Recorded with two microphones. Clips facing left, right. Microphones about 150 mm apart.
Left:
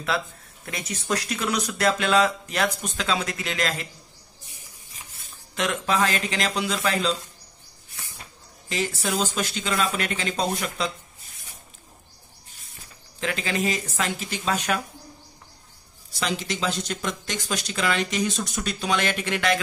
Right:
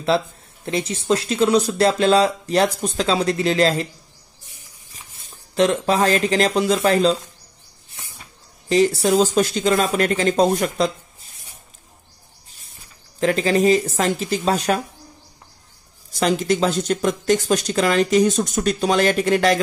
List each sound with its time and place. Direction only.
0.7 s speech: 25° right (ahead or behind)
5.5 s speech: 35° right (ahead or behind)
8.6 s speech: 35° right (ahead or behind)
13.2 s speech: 40° right (ahead or behind)
16.1 s speech: 45° right (ahead or behind)